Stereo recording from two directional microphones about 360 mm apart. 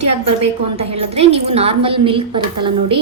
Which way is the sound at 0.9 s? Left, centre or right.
Centre.